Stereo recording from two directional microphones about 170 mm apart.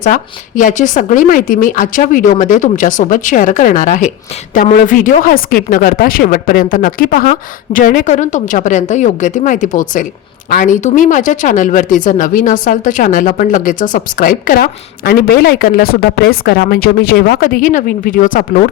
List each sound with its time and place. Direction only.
0.0 s speech: 50° left (ahead or behind)